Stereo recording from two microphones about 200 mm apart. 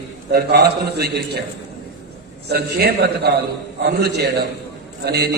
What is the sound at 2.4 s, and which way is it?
A man's voice, 55° right (ahead or behind).